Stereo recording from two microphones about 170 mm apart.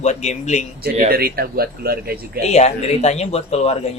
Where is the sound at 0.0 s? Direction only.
40° left (ahead or behind).